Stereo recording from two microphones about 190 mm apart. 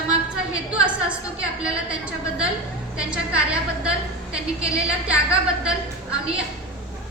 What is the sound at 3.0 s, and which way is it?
Speech, 5° right (ahead or behind).